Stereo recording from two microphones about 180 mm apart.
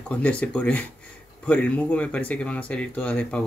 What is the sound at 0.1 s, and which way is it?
Speech, 5° left (ahead or behind).